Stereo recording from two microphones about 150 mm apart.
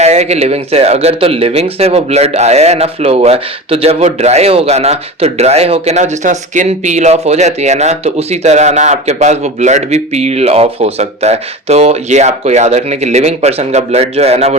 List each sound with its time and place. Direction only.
0.0 s speech: 45° right (ahead or behind)